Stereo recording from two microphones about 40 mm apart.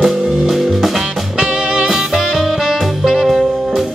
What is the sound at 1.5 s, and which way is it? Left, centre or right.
Music, centre.